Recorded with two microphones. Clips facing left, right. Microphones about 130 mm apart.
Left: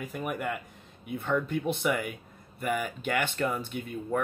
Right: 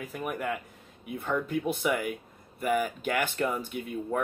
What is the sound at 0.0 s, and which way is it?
Speech, centre (ahead or behind).